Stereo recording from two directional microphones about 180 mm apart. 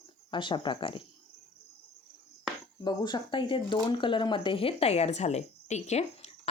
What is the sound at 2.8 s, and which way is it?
Speech, 25° left (ahead or behind).